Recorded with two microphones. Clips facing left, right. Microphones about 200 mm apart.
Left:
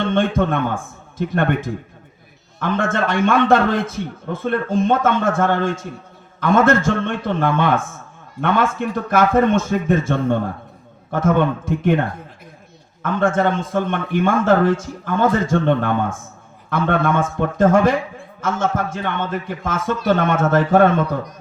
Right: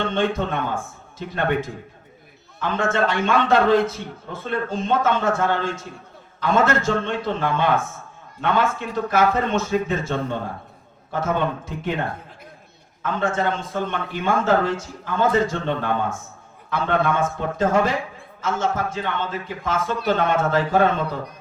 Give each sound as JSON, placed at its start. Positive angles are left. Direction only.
{"t": 0.1, "sound": "a man's voice", "side_deg": 55}
{"t": 13.0, "sound": "a man's voice", "side_deg": 50}